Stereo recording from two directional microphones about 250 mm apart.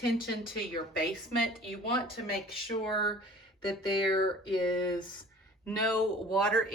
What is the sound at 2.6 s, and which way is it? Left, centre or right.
Speech, left.